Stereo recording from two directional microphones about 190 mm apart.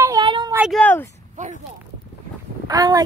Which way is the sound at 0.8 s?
10° left (ahead or behind).